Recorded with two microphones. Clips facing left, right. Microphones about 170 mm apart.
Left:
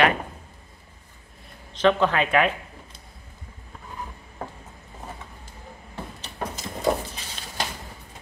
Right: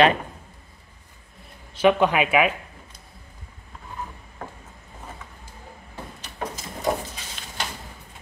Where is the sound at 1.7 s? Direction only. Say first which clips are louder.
Right 2 dB; 10° right (ahead or behind).